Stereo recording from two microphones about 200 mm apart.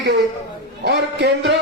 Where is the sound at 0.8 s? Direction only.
55° right (ahead or behind).